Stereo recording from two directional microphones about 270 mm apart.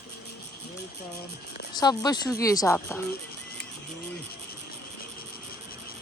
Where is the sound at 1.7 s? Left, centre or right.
Centre.